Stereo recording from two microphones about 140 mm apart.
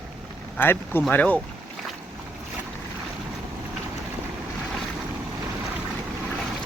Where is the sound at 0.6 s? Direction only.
15° left (ahead or behind).